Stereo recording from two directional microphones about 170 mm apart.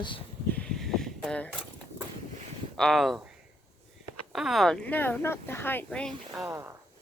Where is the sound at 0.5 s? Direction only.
5° left (ahead or behind).